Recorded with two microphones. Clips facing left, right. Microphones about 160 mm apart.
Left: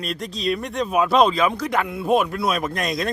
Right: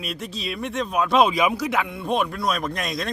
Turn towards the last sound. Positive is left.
turn(degrees=0)  # may be behind; listen again after turning